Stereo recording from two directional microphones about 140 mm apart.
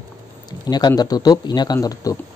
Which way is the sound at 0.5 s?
30° left (ahead or behind).